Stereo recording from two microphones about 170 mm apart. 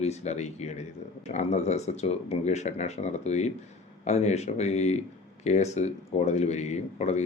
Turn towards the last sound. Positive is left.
turn(degrees=40)  # may be behind; listen again after turning